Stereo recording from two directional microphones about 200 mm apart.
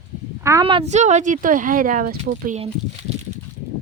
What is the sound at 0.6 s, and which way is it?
Speech, 30° right (ahead or behind).